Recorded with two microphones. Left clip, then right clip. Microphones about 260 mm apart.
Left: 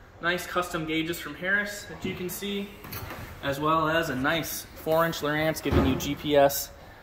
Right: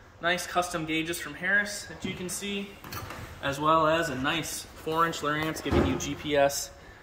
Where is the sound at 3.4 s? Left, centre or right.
Centre.